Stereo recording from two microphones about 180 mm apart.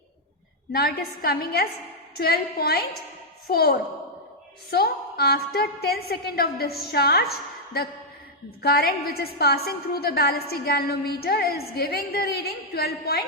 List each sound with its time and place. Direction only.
0.7 s a woman's voice: 60° left (ahead or behind)